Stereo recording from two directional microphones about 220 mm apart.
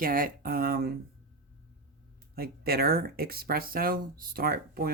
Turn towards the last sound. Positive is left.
turn(degrees=-45)  # may be behind; listen again after turning